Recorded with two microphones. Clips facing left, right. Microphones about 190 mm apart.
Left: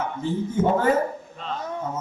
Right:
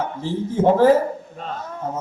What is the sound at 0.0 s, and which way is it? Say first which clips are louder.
Speech: right 1 dB; 30° right (ahead or behind).